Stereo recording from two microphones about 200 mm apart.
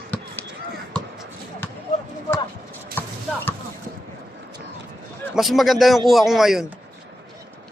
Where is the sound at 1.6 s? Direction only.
10° left (ahead or behind).